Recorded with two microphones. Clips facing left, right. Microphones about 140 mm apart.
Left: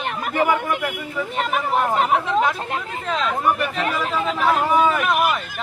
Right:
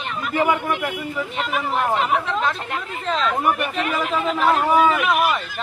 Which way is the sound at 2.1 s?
15° left (ahead or behind).